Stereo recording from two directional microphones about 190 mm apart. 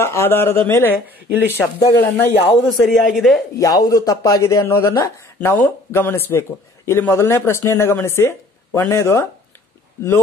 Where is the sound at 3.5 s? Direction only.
20° left (ahead or behind).